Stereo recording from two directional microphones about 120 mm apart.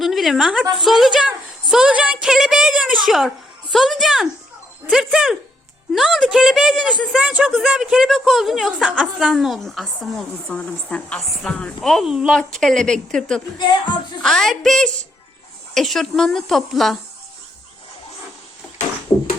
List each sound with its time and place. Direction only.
0.0 s a sound: centre (ahead or behind)
0.7 s a woman's voice: centre (ahead or behind)
13.6 s speech: 40° left (ahead or behind)
14.2 s a woman's voice: 5° left (ahead or behind)